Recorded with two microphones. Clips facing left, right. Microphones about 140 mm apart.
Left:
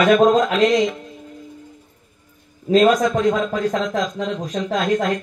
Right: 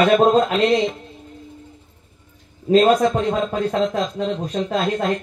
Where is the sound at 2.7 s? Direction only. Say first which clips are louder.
Even; 30° right (ahead or behind).